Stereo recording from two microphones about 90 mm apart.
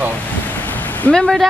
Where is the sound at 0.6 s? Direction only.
20° left (ahead or behind).